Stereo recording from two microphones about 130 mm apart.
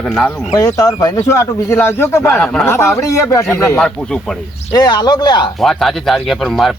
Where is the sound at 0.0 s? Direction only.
5° left (ahead or behind).